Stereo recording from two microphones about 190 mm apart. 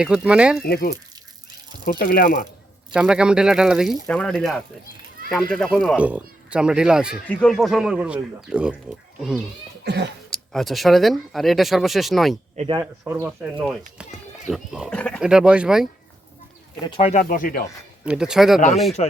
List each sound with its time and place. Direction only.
0.0 s speech: 5° right (ahead or behind)
0.6 s speech: 50° left (ahead or behind)
2.9 s speech: 5° right (ahead or behind)
9.8 s a sound: 65° right (ahead or behind)
10.2 s speech: centre (ahead or behind)
12.5 s speech: 25° right (ahead or behind)
12.8 s speech: 10° right (ahead or behind); by 15.2 s 5° left (ahead or behind)
15.2 s speech: 5° right (ahead or behind)
16.8 s speech: 30° left (ahead or behind)
17.2 s speech: 50° left (ahead or behind)
18.0 s speech: 5° right (ahead or behind)
19.0 s speech: 35° left (ahead or behind)